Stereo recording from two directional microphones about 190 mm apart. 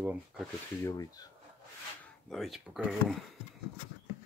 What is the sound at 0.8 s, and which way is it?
Speech, 20° left (ahead or behind).